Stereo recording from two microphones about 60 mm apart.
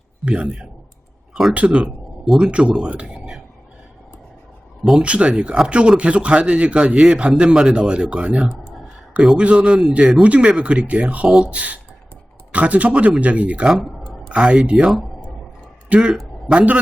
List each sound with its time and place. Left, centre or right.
0.3 s a man's voice: centre
4.9 s a man's voice: centre
15.9 s speech: centre